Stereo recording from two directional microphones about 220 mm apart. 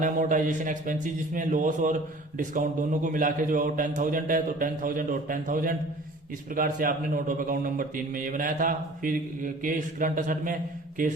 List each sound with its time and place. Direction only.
0.0 s a man's voice: 35° right (ahead or behind)